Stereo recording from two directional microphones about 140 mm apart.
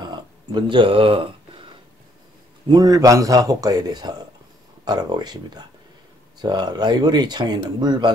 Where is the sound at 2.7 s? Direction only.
25° right (ahead or behind).